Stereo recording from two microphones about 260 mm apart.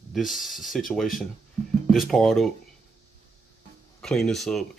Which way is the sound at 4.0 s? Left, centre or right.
Centre.